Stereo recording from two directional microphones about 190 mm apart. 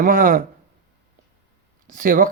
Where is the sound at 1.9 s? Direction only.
45° right (ahead or behind).